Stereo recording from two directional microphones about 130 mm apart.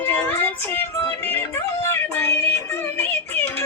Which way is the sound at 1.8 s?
20° left (ahead or behind).